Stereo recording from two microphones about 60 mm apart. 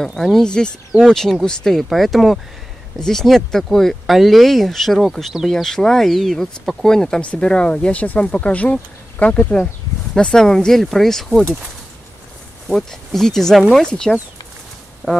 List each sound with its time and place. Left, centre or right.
0.0 s speech: centre; by 9.7 s left
10.1 s speech: centre
12.7 s speech: centre
15.0 s a sound: left